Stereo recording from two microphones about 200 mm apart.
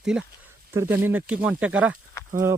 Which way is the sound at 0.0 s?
5° right (ahead or behind).